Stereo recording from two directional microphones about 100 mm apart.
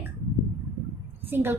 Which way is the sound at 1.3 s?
20° right (ahead or behind).